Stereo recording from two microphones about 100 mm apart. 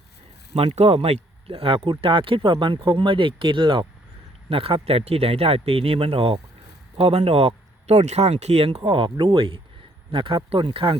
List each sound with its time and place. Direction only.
0.5 s speech: 75° right (ahead or behind); by 3.8 s 55° right (ahead or behind)
4.4 s speech: 70° right (ahead or behind); by 8.8 s 90° right
8.8 s speech: 50° right (ahead or behind)